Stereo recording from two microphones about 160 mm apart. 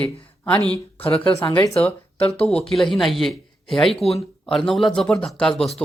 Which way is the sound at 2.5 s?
Centre (ahead or behind).